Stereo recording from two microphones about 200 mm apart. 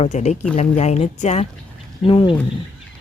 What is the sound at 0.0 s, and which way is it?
Speech, 35° left (ahead or behind).